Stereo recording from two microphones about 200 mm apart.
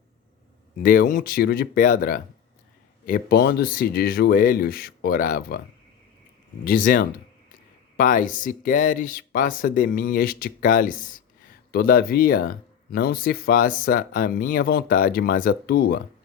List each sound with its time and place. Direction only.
0.8 s speech: 45° left (ahead or behind)
6.7 s speech: 45° left (ahead or behind)